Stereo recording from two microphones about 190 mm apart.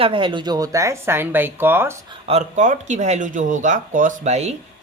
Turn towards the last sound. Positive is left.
turn(degrees=-35)  # may be behind; listen again after turning